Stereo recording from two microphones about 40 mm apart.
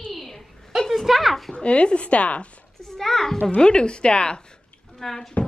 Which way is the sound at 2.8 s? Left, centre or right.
Centre.